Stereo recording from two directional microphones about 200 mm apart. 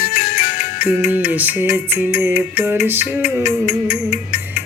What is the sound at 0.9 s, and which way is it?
Music, 10° right (ahead or behind).